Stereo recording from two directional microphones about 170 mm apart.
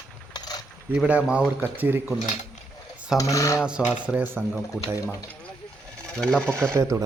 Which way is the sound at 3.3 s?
20° left (ahead or behind).